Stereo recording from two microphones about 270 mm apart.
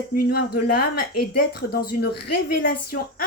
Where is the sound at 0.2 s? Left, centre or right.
Left.